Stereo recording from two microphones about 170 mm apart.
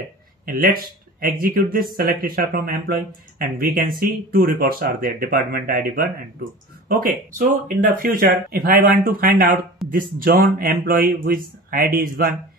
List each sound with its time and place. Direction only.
0.5 s speech: 55° right (ahead or behind)